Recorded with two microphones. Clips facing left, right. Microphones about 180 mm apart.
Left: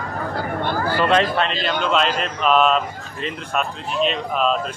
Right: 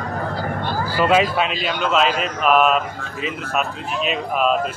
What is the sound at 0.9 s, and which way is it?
A man's voice, 5° right (ahead or behind).